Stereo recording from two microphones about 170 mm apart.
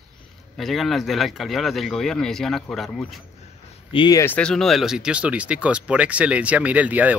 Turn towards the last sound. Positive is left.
turn(degrees=-10)  # may be behind; listen again after turning